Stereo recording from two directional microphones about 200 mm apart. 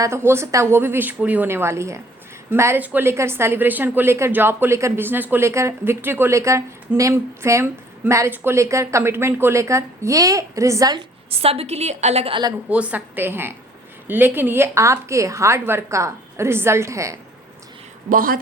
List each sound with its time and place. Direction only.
0.0 s a woman's voice: 10° right (ahead or behind)
12.7 s a woman's voice: 5° right (ahead or behind)
18.1 s a woman's voice: 45° right (ahead or behind)